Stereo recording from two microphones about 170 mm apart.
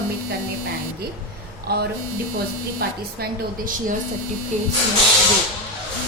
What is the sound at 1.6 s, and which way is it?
A woman's voice, 65° right (ahead or behind).